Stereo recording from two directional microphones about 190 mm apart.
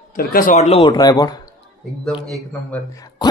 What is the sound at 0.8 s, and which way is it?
Speech, 20° left (ahead or behind).